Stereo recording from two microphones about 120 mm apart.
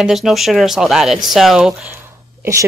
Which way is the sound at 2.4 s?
25° right (ahead or behind).